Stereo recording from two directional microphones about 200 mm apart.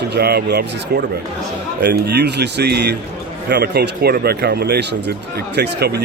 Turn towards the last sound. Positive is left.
turn(degrees=-55)  # may be behind; listen again after turning